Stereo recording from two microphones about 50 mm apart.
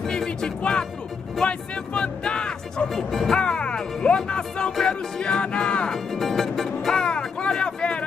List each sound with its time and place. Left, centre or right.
0.0 s music: centre
0.6 s speech: centre
2.9 s speech: centre
3.3 s music: centre
6.1 s music: centre
7.0 s a sound: centre